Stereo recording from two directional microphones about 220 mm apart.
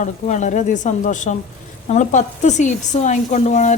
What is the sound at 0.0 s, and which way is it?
Speech, 35° left (ahead or behind).